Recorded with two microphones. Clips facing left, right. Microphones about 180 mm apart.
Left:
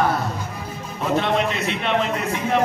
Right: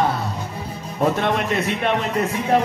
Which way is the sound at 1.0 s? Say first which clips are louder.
Right 1 dB; 50° right (ahead or behind).